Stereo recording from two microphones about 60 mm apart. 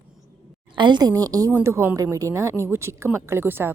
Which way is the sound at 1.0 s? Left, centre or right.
Right.